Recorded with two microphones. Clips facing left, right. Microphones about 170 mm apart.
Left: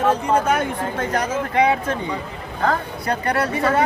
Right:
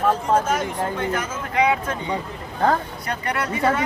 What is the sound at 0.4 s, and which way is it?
Speech, 60° left (ahead or behind).